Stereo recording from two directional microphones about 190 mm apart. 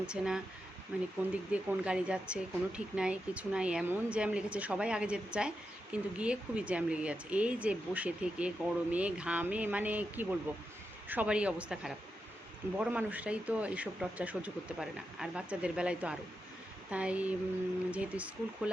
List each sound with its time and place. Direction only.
0.0 s a woman's voice: 5° right (ahead or behind)